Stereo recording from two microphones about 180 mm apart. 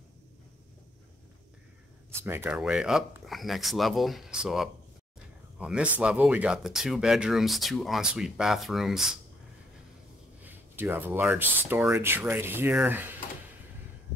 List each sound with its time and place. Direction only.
2.0 s speech: 10° right (ahead or behind)
10.4 s speech: 10° right (ahead or behind)